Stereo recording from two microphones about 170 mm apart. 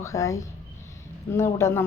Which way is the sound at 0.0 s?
20° left (ahead or behind).